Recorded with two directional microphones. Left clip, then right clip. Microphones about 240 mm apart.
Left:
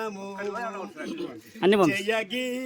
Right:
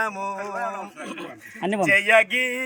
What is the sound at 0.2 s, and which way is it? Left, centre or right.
Speech, centre.